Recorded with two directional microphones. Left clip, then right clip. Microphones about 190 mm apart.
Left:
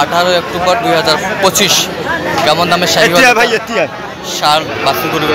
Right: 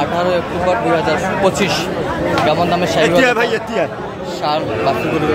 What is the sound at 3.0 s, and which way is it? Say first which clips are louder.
Speech: left 6 dB; 25° left (ahead or behind).